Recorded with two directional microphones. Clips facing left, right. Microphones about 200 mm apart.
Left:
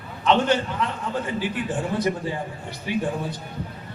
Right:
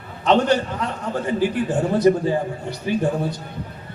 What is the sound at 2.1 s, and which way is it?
Speech, 35° right (ahead or behind).